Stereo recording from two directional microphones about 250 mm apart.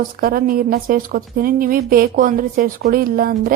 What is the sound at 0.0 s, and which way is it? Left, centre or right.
A woman's voice, right.